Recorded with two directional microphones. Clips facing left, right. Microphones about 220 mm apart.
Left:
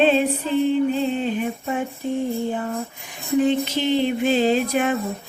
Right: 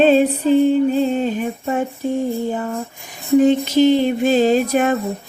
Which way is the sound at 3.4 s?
45° right (ahead or behind).